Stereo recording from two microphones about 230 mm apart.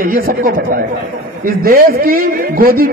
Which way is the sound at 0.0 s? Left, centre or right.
Right.